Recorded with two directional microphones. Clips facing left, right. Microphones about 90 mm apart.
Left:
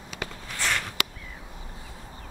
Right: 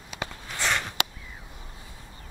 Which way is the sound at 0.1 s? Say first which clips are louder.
Right 1 dB; 25° right (ahead or behind).